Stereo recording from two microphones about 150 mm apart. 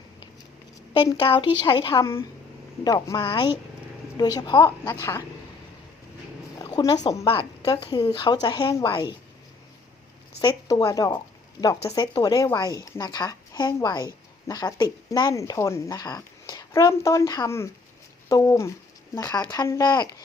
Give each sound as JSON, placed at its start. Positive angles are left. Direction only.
{"t": 0.9, "sound": "a woman's voice", "side_deg": 35}
{"t": 4.9, "sound": "speech", "side_deg": 15}
{"t": 6.6, "sound": "a woman's voice", "side_deg": 25}
{"t": 10.4, "sound": "speech", "side_deg": 25}